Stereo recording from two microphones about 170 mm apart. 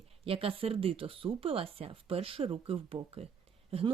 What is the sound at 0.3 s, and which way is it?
Speech, 30° right (ahead or behind).